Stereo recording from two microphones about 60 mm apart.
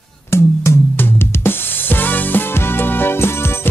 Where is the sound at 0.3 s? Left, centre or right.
Left.